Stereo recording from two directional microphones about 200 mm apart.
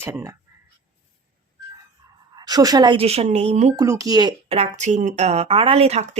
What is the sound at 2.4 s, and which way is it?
Speech, 20° right (ahead or behind).